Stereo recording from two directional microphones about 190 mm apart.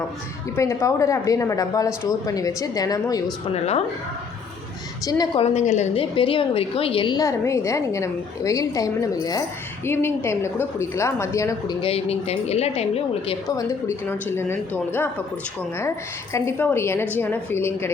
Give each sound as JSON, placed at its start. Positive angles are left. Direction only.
{"t": 0.5, "sound": "a woman's voice", "side_deg": 15}
{"t": 3.5, "sound": "a woman's voice", "side_deg": 35}
{"t": 5.0, "sound": "a woman's voice", "side_deg": 20}
{"t": 5.5, "sound": "a woman's voice", "side_deg": 35}
{"t": 11.8, "sound": "a woman's voice", "side_deg": 30}
{"t": 13.6, "sound": "a woman's voice", "side_deg": 15}
{"t": 16.3, "sound": "a woman's voice", "side_deg": 10}